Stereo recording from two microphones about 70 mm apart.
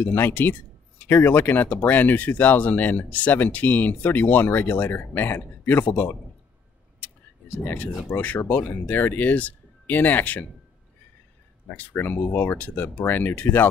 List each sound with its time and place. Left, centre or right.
0.0 s speech: left
7.5 s speech: left
11.7 s speech: left